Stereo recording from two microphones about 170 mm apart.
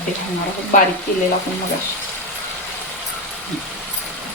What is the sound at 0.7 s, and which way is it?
Speech, 50° left (ahead or behind).